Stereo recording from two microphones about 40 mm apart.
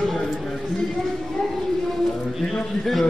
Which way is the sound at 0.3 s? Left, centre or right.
Centre.